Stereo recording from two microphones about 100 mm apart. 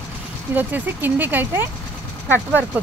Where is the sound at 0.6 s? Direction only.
20° right (ahead or behind).